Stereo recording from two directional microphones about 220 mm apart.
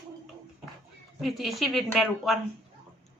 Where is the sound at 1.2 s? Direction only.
Centre (ahead or behind).